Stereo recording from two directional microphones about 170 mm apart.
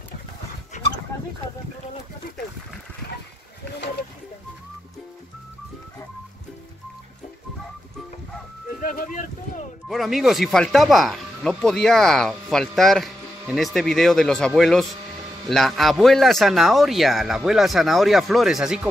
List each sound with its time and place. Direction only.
8.8 s boat: 50° left (ahead or behind)
9.8 s speech: centre (ahead or behind)